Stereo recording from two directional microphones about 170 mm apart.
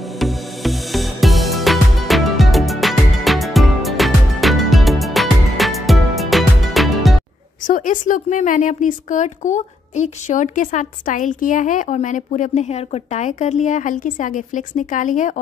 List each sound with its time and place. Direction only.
0.2 s music: centre (ahead or behind)
7.6 s a woman's voice: 50° left (ahead or behind)